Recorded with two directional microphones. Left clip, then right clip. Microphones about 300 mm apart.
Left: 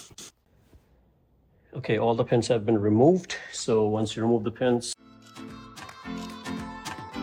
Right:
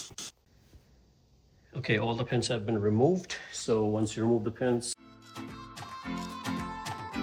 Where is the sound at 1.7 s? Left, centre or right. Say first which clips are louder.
Left 6 dB; centre.